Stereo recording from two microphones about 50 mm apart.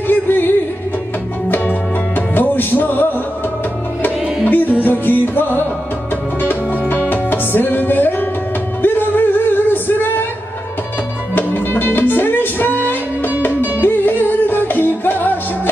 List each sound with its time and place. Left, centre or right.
0.1 s music: left
6.9 s music: left
11.3 s music: left